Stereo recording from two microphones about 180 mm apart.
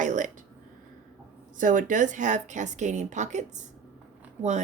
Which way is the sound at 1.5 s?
45° right (ahead or behind).